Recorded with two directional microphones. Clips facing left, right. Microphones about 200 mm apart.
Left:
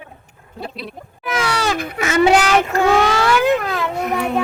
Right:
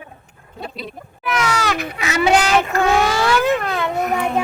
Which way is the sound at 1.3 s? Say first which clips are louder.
Left 1 dB; 30° left (ahead or behind).